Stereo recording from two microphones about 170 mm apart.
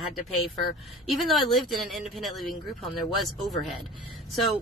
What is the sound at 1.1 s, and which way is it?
Speech, centre (ahead or behind).